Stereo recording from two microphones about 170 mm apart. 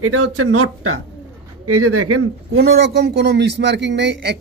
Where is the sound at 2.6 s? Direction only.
70° right (ahead or behind); by 4.3 s 90° right.